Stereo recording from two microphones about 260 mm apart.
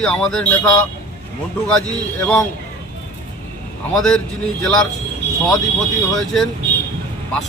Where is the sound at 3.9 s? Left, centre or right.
Centre.